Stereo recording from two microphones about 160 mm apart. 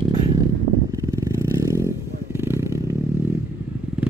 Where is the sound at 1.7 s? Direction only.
20° right (ahead or behind).